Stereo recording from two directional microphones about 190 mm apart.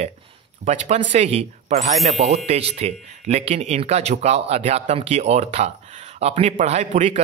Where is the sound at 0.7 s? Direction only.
35° right (ahead or behind).